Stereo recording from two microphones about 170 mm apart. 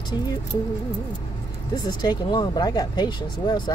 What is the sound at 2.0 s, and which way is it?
Speech, 25° left (ahead or behind).